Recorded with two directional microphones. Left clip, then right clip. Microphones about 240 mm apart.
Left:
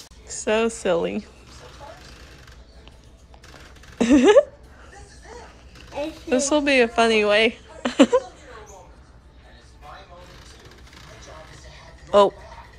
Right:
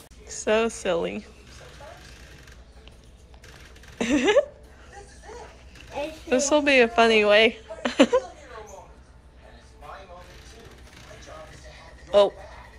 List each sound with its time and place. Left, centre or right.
0.3 s speech: centre
4.0 s a sound: centre
6.2 s a woman's voice: centre
12.1 s speech: centre